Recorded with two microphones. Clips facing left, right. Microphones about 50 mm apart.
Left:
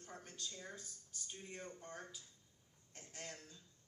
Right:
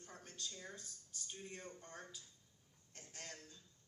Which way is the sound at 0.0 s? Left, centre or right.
Left.